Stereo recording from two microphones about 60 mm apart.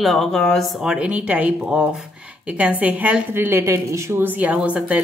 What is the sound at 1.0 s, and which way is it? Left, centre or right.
Speech, right.